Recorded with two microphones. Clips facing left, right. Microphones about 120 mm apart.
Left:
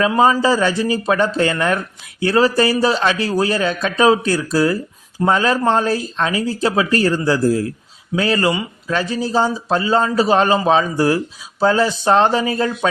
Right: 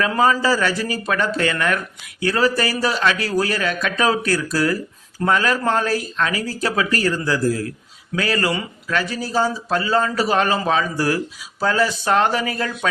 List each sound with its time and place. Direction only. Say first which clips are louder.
0.0 s a man's voice: left 3 dB; 20° left (ahead or behind)